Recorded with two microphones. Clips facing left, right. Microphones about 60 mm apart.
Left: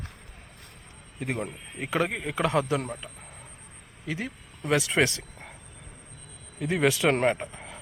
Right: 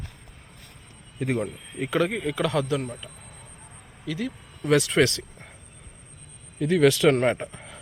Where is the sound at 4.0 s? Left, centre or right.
Left.